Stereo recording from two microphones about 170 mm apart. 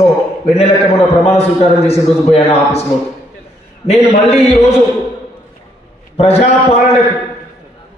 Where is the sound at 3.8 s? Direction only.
40° left (ahead or behind).